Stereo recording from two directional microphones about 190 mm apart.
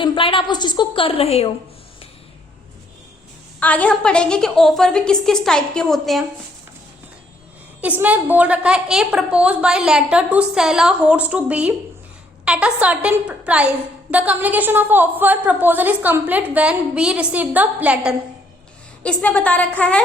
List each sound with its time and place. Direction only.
0.0 s a woman's voice: 25° left (ahead or behind)
3.6 s a woman's voice: 10° left (ahead or behind)
7.8 s a woman's voice: 10° right (ahead or behind)
19.0 s a woman's voice: 5° left (ahead or behind)